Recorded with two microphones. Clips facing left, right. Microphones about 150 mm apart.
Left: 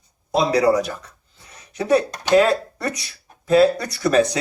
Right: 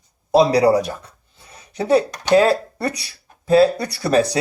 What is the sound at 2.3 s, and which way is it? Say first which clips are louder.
A man's voice: right 1 dB; 30° right (ahead or behind).